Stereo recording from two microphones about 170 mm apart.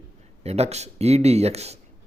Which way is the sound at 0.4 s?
40° right (ahead or behind).